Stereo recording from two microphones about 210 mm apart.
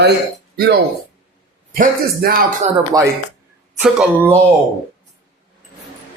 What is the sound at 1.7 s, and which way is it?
Speech, 40° right (ahead or behind).